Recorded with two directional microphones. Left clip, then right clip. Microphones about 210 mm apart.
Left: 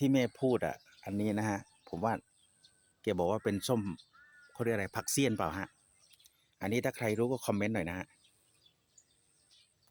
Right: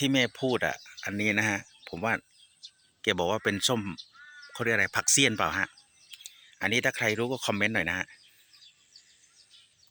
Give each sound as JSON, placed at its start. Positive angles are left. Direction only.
{"t": 0.0, "sound": "speech", "side_deg": 5}
{"t": 2.6, "sound": "a sound", "side_deg": 55}
{"t": 3.0, "sound": "speech", "side_deg": 5}